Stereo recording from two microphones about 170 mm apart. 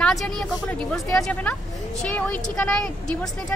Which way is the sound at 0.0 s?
Centre (ahead or behind).